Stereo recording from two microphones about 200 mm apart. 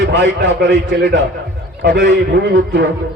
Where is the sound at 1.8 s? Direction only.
50° right (ahead or behind).